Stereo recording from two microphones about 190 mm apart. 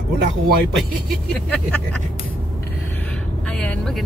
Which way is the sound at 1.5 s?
5° left (ahead or behind).